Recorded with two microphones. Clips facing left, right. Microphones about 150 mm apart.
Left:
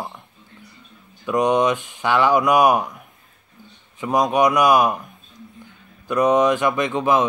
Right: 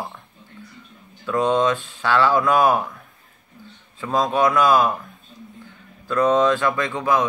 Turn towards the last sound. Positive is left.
turn(degrees=20)  # may be behind; listen again after turning